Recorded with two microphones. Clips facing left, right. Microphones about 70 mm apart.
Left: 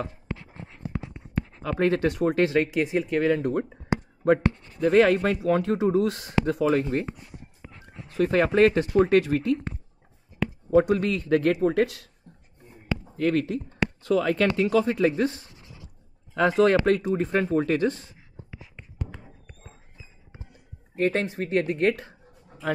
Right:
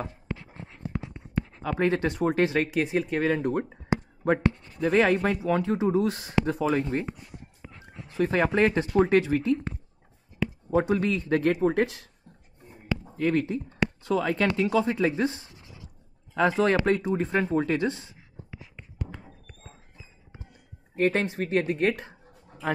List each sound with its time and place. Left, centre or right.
1.6 s speech: centre
5.4 s speech: centre
8.2 s speech: centre
10.7 s speech: centre
13.0 s speech: centre
20.9 s speech: centre